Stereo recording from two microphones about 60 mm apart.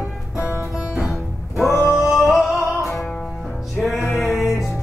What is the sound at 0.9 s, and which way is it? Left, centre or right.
Music, centre.